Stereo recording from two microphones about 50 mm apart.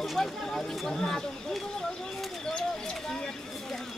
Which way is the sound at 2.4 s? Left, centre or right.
Centre.